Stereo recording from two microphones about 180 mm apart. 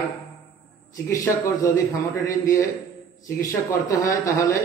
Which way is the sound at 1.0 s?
15° left (ahead or behind).